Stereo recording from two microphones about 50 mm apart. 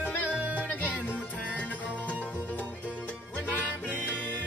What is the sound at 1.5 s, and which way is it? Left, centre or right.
Music, left.